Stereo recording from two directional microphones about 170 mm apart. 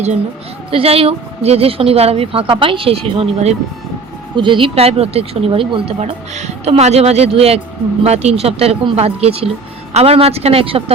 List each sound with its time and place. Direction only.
0.7 s speech: 35° right (ahead or behind)